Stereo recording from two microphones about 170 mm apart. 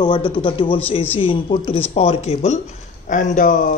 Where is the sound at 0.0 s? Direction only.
25° left (ahead or behind).